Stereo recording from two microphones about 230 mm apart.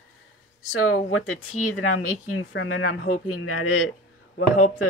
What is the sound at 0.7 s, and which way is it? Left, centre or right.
Speech, left.